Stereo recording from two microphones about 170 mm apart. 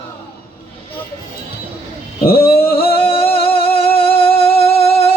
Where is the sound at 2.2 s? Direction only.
60° left (ahead or behind).